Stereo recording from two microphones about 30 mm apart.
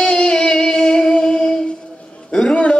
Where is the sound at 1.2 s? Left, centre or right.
Left.